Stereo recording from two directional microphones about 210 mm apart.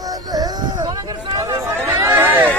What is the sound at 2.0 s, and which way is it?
Chatter, 10° right (ahead or behind).